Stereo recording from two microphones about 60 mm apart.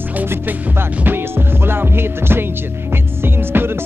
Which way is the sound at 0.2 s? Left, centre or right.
Right.